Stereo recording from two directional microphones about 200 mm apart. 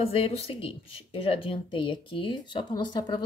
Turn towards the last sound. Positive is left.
turn(degrees=20)  # may be behind; listen again after turning